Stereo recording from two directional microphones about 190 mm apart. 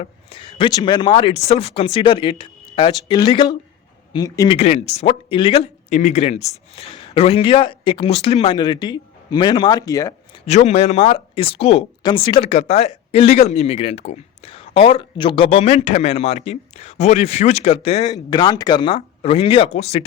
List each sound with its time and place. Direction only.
0.0 s speech: 30° left (ahead or behind)
4.5 s speech: 35° left (ahead or behind)
10.4 s speech: 35° left (ahead or behind)